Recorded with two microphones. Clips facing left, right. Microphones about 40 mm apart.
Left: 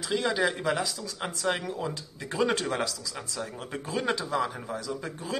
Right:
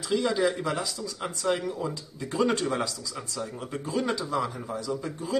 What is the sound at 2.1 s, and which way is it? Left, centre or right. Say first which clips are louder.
Speech: right 2 dB; left.